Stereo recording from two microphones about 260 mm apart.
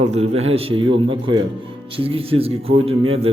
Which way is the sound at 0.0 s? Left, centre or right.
Right.